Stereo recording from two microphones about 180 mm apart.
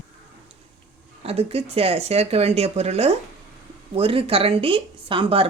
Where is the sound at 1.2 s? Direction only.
35° right (ahead or behind).